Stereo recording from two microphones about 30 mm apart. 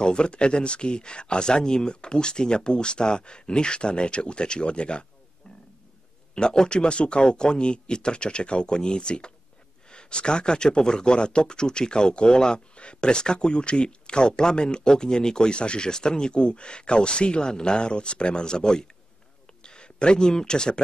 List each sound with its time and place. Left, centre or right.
0.0 s speech: left
6.3 s speech: left
15.9 s speech: left
19.6 s a sound: left
20.3 s speech: left